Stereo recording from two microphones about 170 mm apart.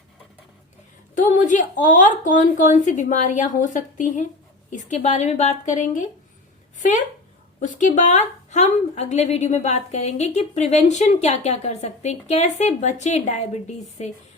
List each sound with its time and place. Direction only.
1.1 s a woman's voice: 50° left (ahead or behind)